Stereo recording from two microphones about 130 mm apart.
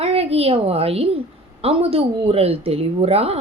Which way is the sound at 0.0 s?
50° right (ahead or behind).